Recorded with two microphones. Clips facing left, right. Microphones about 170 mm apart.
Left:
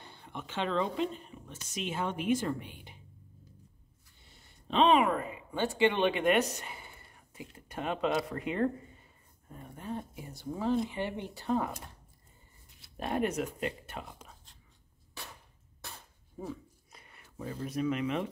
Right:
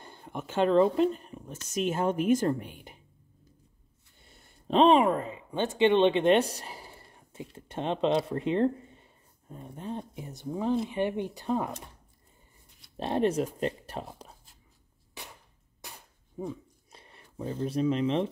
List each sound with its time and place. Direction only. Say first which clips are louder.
0.0 s a woman's voice: right 5 dB; 45° right (ahead or behind)
4.2 s a sound: right 3 dB; 50° right (ahead or behind); by 7.4 s 30° right (ahead or behind)
7.5 s speech: right 4 dB; 25° right (ahead or behind)
12.9 s speech: right 5 dB; 25° right (ahead or behind)
15.2 s a sound: right 1 dB; 20° right (ahead or behind)
16.9 s speech: right 4 dB; 30° right (ahead or behind)